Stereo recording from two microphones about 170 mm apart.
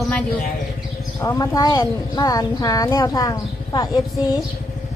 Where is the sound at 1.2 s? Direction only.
20° left (ahead or behind).